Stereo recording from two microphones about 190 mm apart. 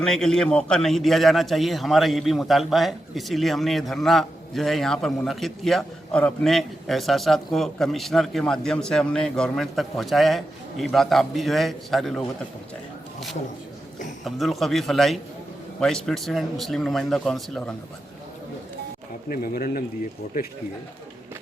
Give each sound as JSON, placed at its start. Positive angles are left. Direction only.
{"t": 0.0, "sound": "a man's voice", "side_deg": 5}
{"t": 14.3, "sound": "a man's voice", "side_deg": 0}
{"t": 19.3, "sound": "speech", "side_deg": 50}